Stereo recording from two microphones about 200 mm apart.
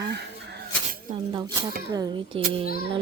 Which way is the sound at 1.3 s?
20° right (ahead or behind).